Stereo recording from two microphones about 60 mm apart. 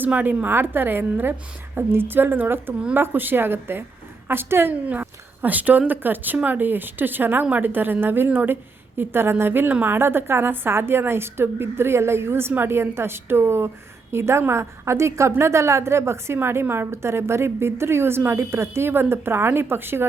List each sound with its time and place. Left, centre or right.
0.0 s a woman's voice: right
4.7 s a woman's voice: right